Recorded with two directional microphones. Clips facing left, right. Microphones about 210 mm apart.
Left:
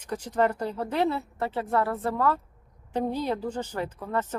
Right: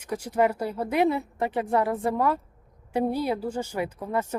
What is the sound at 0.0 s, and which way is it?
A woman's voice, 10° right (ahead or behind).